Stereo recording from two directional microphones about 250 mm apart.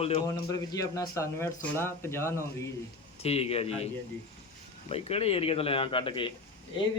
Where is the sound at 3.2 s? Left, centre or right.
Left.